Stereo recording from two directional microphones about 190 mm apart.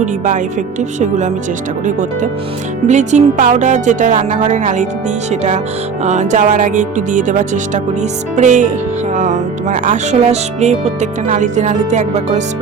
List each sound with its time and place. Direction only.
0.0 s speech: 40° right (ahead or behind)
2.8 s speech: 40° right (ahead or behind)